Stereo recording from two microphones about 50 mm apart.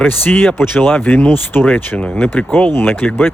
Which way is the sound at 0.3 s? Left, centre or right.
Left.